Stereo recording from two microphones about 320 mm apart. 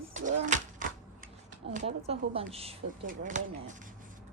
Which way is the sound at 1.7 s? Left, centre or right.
Centre.